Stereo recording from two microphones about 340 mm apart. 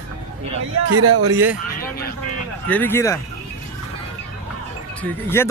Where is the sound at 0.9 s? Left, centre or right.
Right.